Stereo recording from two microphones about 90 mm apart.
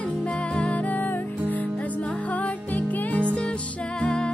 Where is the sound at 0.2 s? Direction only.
15° left (ahead or behind).